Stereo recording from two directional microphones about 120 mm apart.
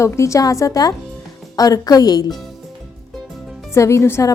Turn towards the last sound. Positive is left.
turn(degrees=25)  # may be behind; listen again after turning